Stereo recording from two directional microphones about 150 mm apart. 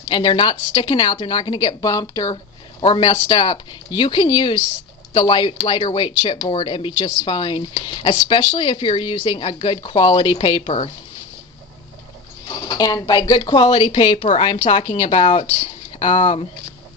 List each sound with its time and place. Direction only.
0.1 s speech: 35° left (ahead or behind)
12.6 s speech: 25° left (ahead or behind)